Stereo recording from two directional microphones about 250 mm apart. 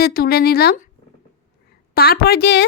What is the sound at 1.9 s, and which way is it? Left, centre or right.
Speech, left.